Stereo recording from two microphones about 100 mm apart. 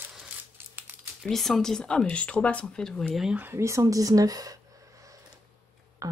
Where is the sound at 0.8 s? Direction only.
20° right (ahead or behind).